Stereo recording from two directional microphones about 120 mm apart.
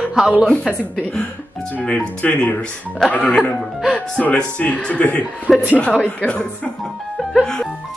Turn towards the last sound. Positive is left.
turn(degrees=5)  # may be behind; listen again after turning